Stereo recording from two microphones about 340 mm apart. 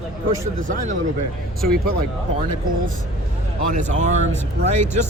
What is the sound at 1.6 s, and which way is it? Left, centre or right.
Speech, right.